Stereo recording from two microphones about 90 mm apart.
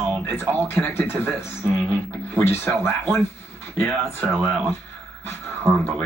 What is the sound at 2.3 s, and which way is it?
Speech, 30° left (ahead or behind).